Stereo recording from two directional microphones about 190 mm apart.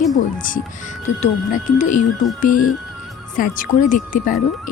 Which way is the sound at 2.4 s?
45° left (ahead or behind).